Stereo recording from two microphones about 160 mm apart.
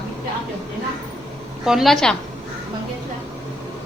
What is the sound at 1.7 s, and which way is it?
Speech, centre (ahead or behind).